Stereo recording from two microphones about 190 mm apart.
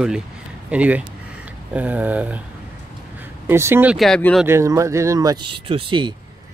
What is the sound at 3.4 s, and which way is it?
Speech, 10° right (ahead or behind).